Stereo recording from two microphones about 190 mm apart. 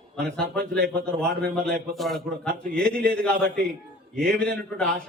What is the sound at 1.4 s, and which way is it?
A man's voice, 5° left (ahead or behind).